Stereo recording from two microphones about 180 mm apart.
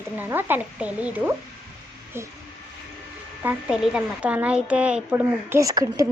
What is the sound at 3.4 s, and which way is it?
Speech, 5° right (ahead or behind).